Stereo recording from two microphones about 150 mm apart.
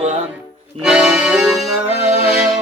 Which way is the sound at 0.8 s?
5° right (ahead or behind).